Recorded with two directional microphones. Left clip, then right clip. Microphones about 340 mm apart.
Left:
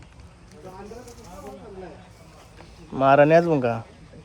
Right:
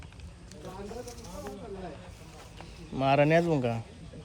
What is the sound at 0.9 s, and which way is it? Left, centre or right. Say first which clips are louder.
Speech: even; centre.